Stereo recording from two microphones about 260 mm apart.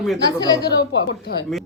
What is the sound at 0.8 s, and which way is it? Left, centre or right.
Speech, left.